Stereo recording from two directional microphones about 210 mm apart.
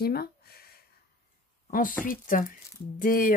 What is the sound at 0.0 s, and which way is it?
Speech, 45° left (ahead or behind).